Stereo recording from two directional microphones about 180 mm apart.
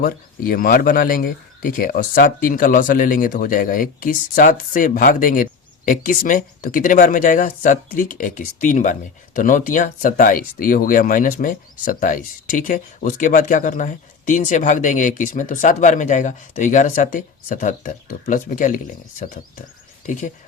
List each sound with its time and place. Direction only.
0.0 s speech: 55° left (ahead or behind)